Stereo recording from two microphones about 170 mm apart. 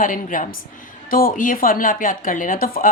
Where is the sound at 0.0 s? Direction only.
50° left (ahead or behind).